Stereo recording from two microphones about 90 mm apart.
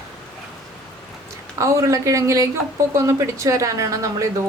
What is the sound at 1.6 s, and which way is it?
Speech, 35° right (ahead or behind).